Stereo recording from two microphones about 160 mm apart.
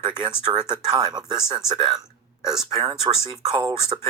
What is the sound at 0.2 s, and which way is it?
Speech, 30° right (ahead or behind).